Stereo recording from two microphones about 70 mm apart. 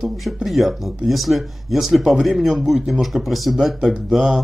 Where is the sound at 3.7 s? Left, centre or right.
Centre.